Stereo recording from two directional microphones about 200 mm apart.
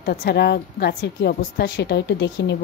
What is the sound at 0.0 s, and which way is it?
A woman's voice, 50° left (ahead or behind).